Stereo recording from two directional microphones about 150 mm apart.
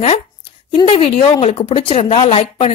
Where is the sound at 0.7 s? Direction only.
40° left (ahead or behind).